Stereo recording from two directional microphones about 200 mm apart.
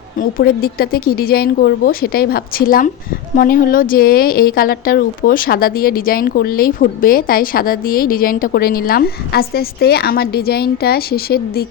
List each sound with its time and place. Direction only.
0.2 s a woman's voice: 45° left (ahead or behind)